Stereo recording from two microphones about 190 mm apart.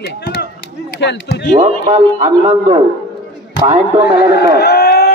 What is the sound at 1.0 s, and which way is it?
Speech, 65° left (ahead or behind).